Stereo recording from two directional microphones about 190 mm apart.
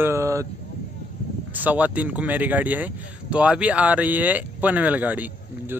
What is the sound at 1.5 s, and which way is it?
Speech, 10° right (ahead or behind).